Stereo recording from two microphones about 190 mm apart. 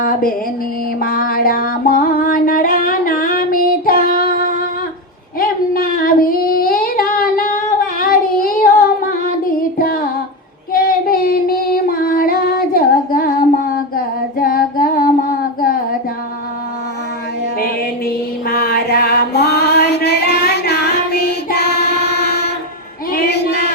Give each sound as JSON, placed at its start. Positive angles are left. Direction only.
{"t": 0.0, "sound": "music", "side_deg": 50}
{"t": 5.4, "sound": "child singing", "side_deg": 50}
{"t": 10.7, "sound": "female singing", "side_deg": 50}
{"t": 17.6, "sound": "music", "side_deg": 50}
{"t": 23.1, "sound": "a sound", "side_deg": 60}